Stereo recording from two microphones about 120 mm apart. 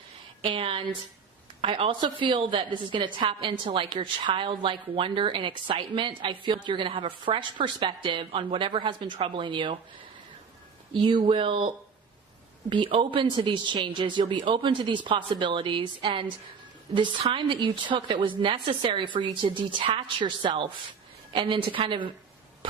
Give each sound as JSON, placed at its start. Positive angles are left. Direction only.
{"t": 0.4, "sound": "a woman's voice", "side_deg": -50}
{"t": 10.9, "sound": "a woman's voice", "side_deg": -45}
{"t": 12.7, "sound": "a woman's voice", "side_deg": -45}